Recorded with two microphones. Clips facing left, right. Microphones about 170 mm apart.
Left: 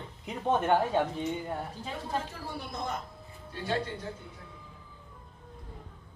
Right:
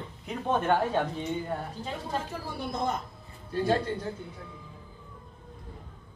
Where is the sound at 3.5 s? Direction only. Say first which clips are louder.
Right 6 dB; 40° right (ahead or behind).